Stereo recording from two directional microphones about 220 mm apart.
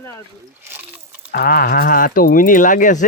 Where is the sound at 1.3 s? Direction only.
45° left (ahead or behind).